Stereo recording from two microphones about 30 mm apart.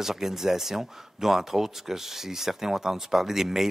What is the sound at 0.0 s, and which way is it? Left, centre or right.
Speech, centre.